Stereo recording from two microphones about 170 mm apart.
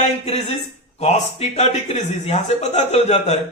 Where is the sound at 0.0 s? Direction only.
35° left (ahead or behind).